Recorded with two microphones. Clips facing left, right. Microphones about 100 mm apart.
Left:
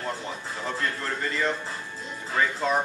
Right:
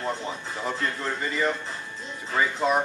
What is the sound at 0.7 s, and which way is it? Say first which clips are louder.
A man's voice: right 1 dB; 10° right (ahead or behind).